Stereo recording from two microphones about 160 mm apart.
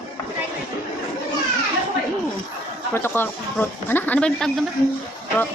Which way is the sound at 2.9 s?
15° left (ahead or behind).